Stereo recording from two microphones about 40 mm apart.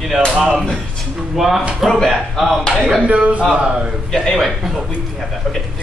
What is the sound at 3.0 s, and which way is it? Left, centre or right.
Speech, right.